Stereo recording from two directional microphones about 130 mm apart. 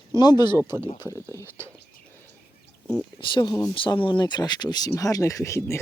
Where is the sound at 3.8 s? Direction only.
40° left (ahead or behind).